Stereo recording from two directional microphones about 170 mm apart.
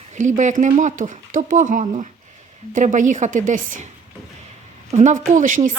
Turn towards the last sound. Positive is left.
turn(degrees=-50)  # may be behind; listen again after turning